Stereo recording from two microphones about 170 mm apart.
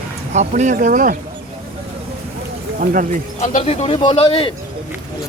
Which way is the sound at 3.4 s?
40° left (ahead or behind).